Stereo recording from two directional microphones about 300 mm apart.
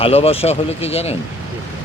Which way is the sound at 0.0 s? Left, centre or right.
Centre.